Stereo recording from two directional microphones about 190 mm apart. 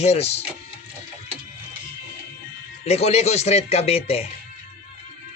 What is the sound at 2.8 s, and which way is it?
A man's voice, 35° left (ahead or behind).